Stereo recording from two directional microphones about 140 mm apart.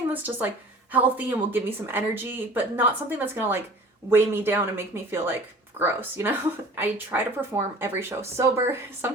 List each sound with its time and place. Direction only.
0.1 s a woman's voice: 10° right (ahead or behind)